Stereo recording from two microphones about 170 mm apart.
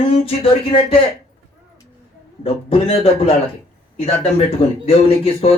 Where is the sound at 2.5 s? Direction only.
35° left (ahead or behind).